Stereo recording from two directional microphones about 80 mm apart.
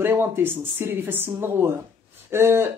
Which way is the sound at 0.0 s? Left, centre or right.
Right.